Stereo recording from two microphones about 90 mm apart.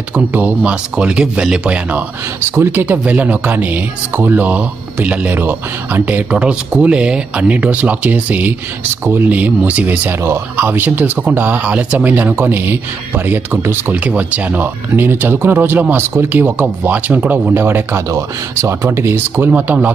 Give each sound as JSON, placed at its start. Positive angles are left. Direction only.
{"t": 0.1, "sound": "speech", "side_deg": -20}
{"t": 2.5, "sound": "speech", "side_deg": -25}